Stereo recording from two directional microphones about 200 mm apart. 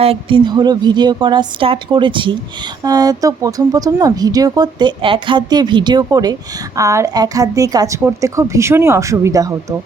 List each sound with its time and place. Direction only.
0.0 s a woman's voice: 30° right (ahead or behind)